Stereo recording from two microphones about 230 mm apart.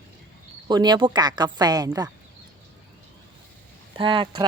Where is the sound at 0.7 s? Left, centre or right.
Centre.